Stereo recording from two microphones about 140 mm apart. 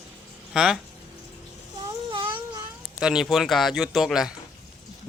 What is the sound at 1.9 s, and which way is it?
Baby cry, 35° right (ahead or behind).